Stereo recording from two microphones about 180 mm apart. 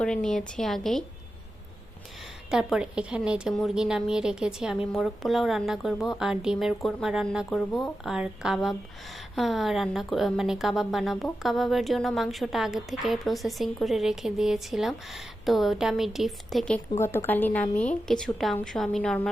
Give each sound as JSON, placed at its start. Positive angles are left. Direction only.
{"t": 0.0, "sound": "a woman's voice", "side_deg": 5}
{"t": 2.5, "sound": "a woman's voice", "side_deg": -5}